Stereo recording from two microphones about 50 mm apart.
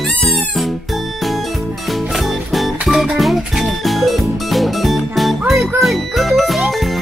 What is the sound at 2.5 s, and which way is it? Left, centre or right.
Music, centre.